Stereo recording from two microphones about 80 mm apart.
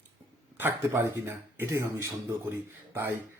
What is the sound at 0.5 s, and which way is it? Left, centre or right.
Speech, right.